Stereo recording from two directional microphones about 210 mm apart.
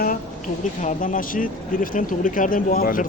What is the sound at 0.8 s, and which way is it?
Speech, 40° left (ahead or behind).